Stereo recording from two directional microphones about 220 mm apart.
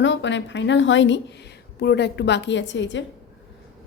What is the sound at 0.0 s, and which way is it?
A woman's voice, 55° left (ahead or behind).